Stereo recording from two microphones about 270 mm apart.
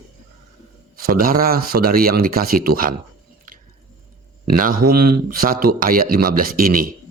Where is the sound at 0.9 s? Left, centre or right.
Right.